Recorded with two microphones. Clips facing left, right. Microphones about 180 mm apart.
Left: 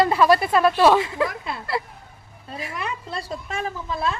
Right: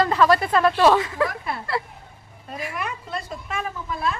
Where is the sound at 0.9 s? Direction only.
25° left (ahead or behind).